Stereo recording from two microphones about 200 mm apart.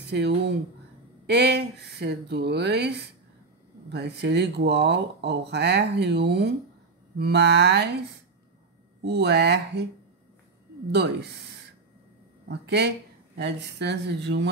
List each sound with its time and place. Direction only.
0.1 s speech: 60° right (ahead or behind)
9.0 s speech: 55° right (ahead or behind)
10.9 s speech: 55° right (ahead or behind)
12.4 s speech: 55° right (ahead or behind)